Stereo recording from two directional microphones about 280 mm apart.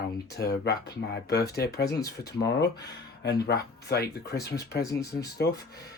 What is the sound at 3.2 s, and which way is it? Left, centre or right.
Speech, left.